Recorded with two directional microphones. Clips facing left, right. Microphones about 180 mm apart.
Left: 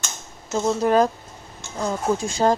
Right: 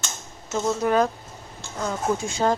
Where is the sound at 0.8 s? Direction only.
35° left (ahead or behind).